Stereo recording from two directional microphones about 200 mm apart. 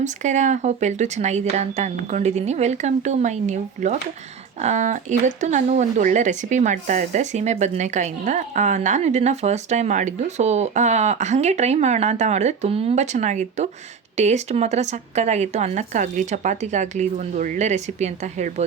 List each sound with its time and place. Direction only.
0.0 s speech: 35° right (ahead or behind)